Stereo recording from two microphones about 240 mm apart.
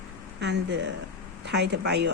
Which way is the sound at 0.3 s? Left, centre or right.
Right.